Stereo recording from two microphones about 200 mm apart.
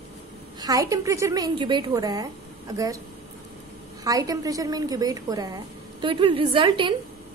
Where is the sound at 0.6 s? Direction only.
15° right (ahead or behind).